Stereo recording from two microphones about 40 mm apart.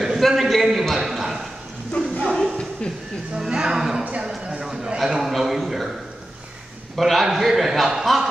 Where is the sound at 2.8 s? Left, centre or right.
Left.